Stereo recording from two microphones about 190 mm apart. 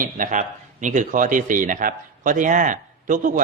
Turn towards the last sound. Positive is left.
turn(degrees=-40)  # may be behind; listen again after turning